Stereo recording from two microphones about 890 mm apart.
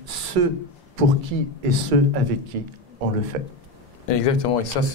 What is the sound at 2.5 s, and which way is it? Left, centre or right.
Speech, right.